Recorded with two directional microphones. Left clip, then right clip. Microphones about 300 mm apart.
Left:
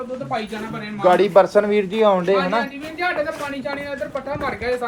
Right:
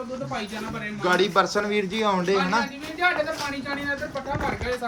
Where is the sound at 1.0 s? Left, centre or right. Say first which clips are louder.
Left 7 dB; centre.